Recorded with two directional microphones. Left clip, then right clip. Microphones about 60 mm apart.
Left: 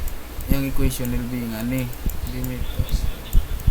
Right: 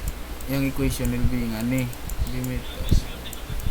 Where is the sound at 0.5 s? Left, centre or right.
Centre.